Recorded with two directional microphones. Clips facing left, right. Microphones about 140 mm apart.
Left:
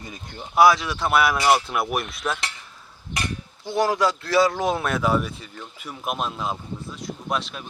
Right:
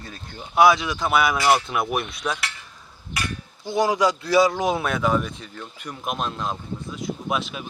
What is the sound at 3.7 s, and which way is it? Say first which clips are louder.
Speech: right 1 dB; centre (ahead or behind).